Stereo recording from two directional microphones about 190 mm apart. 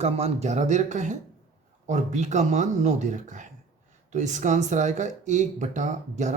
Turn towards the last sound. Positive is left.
turn(degrees=-40)  # may be behind; listen again after turning